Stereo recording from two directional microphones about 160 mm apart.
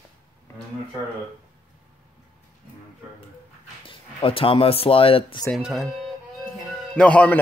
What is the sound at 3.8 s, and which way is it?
Speech, 35° left (ahead or behind).